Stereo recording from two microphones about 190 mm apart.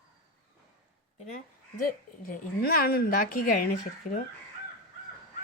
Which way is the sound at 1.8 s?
50° left (ahead or behind).